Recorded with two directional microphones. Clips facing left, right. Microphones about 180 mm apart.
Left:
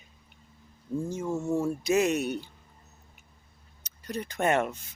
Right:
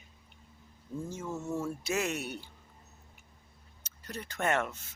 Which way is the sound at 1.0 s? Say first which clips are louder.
Left 6 dB; 15° left (ahead or behind).